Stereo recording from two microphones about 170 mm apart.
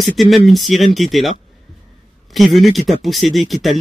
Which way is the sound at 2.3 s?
Centre (ahead or behind).